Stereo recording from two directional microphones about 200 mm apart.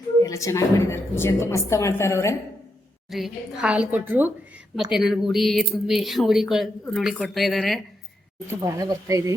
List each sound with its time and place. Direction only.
0.2 s a woman's voice: 15° left (ahead or behind)
3.1 s a woman's voice: centre (ahead or behind)
8.4 s a woman's voice: 15° right (ahead or behind)